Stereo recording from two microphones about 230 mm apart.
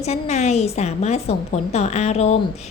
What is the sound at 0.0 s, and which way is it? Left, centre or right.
A woman's voice, left.